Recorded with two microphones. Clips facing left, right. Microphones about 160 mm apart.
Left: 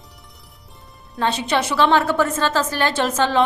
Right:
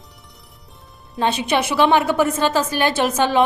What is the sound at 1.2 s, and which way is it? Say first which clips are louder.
A woman's voice: right 1 dB; 15° right (ahead or behind).